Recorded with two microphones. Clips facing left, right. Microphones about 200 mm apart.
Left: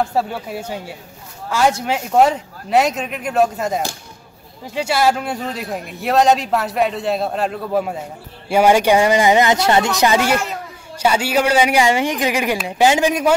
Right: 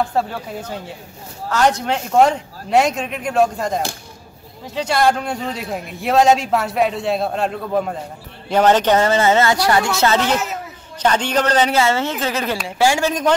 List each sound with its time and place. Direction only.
0.1 s a man's voice: 5° left (ahead or behind)